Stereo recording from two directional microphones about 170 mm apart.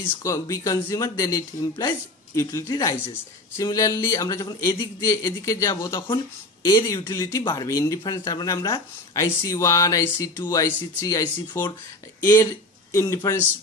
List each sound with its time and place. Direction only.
0.2 s a man's voice: 20° left (ahead or behind)